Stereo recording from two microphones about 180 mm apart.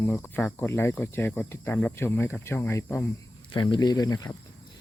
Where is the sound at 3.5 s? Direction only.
25° left (ahead or behind).